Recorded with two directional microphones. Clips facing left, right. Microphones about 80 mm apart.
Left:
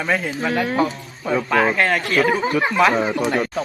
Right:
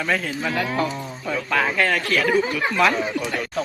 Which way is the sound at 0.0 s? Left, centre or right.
Left.